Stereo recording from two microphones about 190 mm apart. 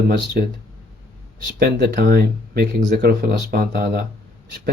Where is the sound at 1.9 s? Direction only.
50° right (ahead or behind).